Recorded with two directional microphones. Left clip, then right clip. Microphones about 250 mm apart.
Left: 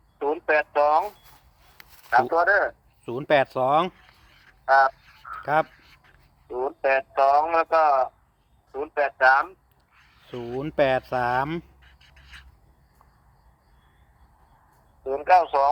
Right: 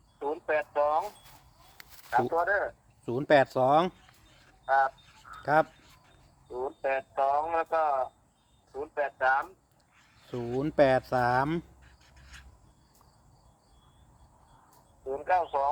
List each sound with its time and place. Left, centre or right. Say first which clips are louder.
0.2 s a sound: left 7 dB; left
2.3 s a man's voice: left 7 dB; left
3.1 s speech: left 2 dB; centre
4.6 s a man's voice: left 7 dB; left
5.4 s dog: left 2 dB; centre
6.5 s a man's voice: left 8 dB; left
9.9 s a sound: left 2 dB; centre
15.0 s a man's voice: left 9 dB; left